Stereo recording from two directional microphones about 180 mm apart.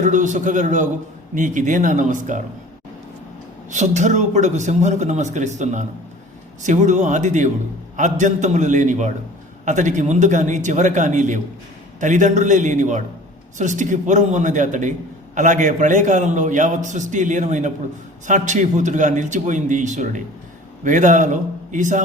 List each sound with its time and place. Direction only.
0.0 s a man's voice: 45° right (ahead or behind)
3.7 s a man's voice: 40° right (ahead or behind)